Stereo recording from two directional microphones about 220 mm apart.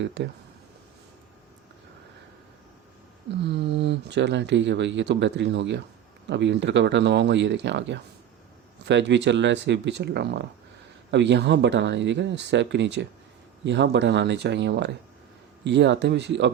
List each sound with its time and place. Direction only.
0.0 s speech: 55° right (ahead or behind)
3.4 s speech: 50° right (ahead or behind)